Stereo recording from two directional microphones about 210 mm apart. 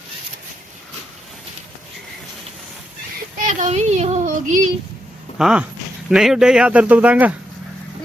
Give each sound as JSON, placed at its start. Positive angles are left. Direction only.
{"t": 3.4, "sound": "child singing", "side_deg": -35}
{"t": 5.4, "sound": "speech", "side_deg": -5}